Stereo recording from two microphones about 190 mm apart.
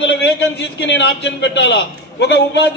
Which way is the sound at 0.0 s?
65° left (ahead or behind).